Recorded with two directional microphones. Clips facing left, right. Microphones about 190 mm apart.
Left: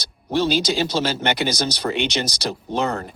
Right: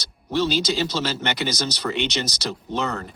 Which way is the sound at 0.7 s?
55° left (ahead or behind).